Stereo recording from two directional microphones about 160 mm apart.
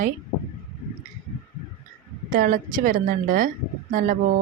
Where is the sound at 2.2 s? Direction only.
60° right (ahead or behind).